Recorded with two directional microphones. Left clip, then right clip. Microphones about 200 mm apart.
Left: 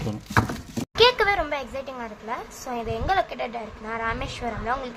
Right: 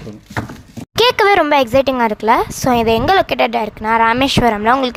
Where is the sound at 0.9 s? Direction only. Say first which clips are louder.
Right 8 dB; 55° right (ahead or behind).